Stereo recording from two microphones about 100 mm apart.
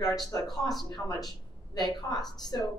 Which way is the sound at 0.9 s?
40° left (ahead or behind).